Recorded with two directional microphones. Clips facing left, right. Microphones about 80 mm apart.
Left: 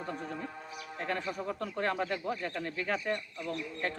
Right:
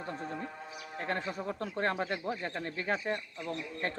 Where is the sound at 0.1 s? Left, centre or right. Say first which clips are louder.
Right 2 dB; right.